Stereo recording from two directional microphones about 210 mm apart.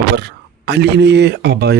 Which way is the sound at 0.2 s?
55° right (ahead or behind).